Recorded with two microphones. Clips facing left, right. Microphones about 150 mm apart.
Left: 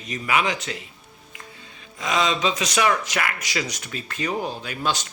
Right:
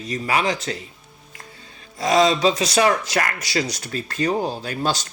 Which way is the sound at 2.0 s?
35° right (ahead or behind).